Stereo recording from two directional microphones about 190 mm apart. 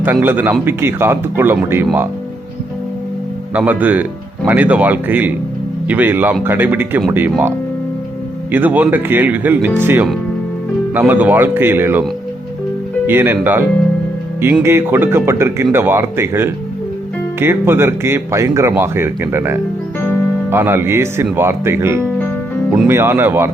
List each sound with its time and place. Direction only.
0.0 s speech: 10° right (ahead or behind)
3.5 s speech: 10° right (ahead or behind)
8.5 s speech: 10° right (ahead or behind)
13.1 s speech: 10° right (ahead or behind)